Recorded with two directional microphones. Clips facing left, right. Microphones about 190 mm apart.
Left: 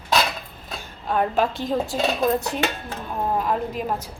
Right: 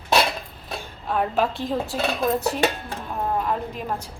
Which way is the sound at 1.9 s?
15° left (ahead or behind).